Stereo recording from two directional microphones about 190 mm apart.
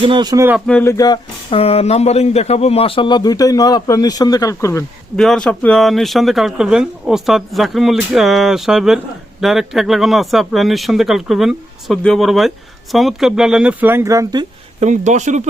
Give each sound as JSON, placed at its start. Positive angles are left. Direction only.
{"t": 0.0, "sound": "speech", "side_deg": -25}
{"t": 0.7, "sound": "speech", "side_deg": 10}
{"t": 5.1, "sound": "speech", "side_deg": 5}
{"t": 14.8, "sound": "speech", "side_deg": -40}